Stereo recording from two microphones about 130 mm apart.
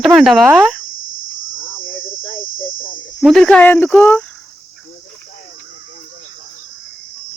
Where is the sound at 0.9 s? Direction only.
90° left.